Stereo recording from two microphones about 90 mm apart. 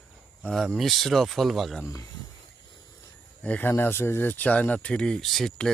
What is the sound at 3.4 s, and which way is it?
Speech, 15° left (ahead or behind).